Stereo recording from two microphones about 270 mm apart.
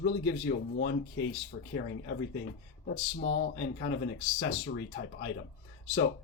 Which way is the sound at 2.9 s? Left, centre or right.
Left.